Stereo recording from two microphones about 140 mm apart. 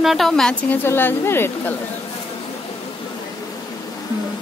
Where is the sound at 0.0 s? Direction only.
Centre (ahead or behind).